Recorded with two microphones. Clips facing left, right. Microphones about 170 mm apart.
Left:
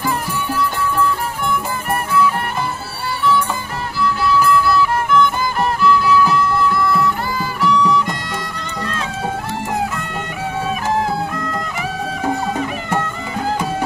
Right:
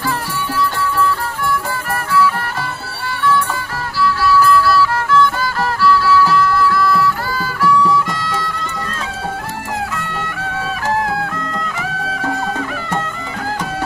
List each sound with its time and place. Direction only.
4.0 s music: 20° left (ahead or behind)